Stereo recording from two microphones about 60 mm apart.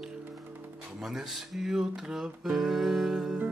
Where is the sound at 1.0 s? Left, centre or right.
Centre.